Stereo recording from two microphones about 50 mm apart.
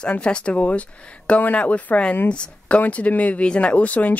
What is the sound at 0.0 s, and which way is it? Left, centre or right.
Speech, left.